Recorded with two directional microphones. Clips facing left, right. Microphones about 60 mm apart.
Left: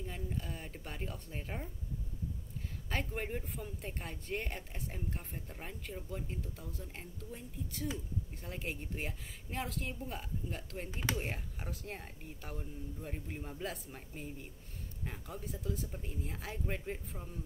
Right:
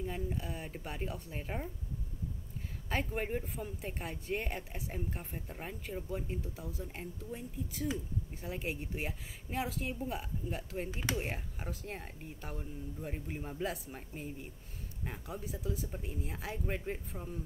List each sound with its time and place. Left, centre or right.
0.0 s speech: centre
2.9 s a woman's voice: centre